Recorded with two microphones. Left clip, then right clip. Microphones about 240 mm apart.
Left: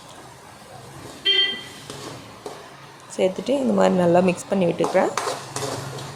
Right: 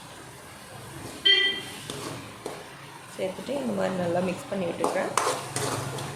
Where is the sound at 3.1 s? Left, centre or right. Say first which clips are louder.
Left 9 dB; left.